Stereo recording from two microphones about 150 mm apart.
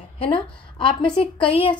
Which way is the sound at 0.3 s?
35° left (ahead or behind).